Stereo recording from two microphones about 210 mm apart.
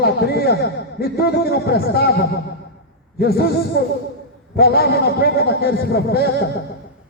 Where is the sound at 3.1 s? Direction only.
50° left (ahead or behind).